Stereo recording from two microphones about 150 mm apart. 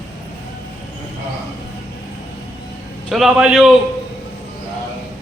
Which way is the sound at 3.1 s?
Centre (ahead or behind).